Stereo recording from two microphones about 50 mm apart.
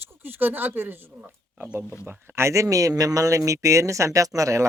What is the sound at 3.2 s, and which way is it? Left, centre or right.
Speech, right.